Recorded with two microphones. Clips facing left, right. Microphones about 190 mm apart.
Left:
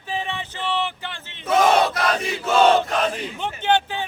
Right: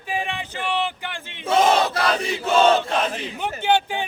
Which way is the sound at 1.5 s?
25° right (ahead or behind).